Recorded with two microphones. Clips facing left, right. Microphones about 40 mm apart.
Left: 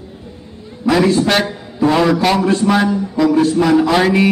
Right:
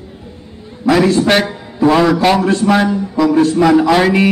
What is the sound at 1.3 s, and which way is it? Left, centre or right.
A man's voice, centre.